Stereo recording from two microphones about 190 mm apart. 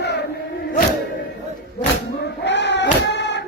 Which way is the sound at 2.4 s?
70° left (ahead or behind).